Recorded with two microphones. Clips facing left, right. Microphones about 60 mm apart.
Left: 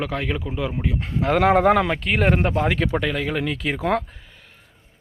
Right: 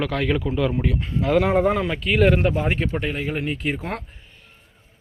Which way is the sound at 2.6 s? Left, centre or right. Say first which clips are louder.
Left 2 dB; left.